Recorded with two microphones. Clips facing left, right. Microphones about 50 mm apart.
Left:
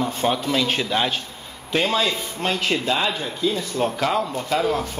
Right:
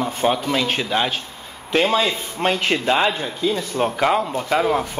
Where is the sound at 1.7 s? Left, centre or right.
Right.